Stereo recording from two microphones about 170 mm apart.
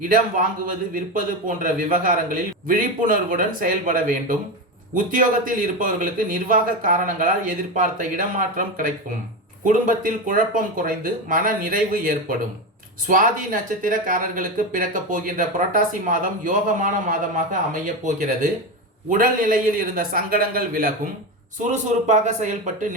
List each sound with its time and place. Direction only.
0.0 s speech: 55° right (ahead or behind)
19.1 s a man's voice: 55° right (ahead or behind)
21.7 s speech: 45° right (ahead or behind)